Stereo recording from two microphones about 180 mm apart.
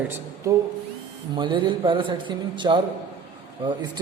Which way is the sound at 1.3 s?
25° right (ahead or behind).